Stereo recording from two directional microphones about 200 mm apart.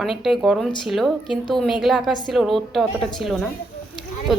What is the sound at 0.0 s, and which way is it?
Speech, centre (ahead or behind).